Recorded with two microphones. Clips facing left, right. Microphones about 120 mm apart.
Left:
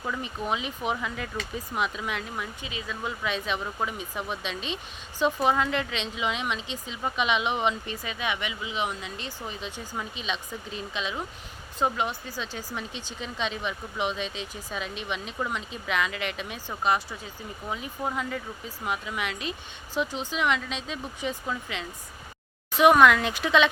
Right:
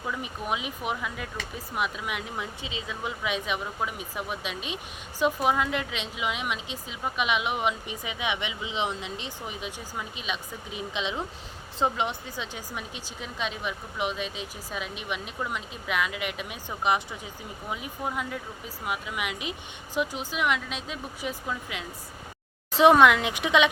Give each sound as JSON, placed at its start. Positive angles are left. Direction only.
{"t": 0.0, "sound": "a woman's voice", "side_deg": -5}
{"t": 2.3, "sound": "a woman's voice", "side_deg": -25}
{"t": 8.0, "sound": "a woman's voice", "side_deg": -20}
{"t": 17.7, "sound": "a woman's voice", "side_deg": -5}
{"t": 22.8, "sound": "speech", "side_deg": -25}